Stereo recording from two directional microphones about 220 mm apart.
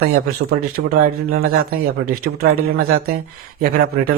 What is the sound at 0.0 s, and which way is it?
Speech, 45° right (ahead or behind).